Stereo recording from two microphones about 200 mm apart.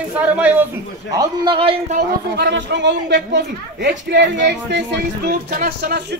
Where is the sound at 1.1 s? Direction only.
20° right (ahead or behind).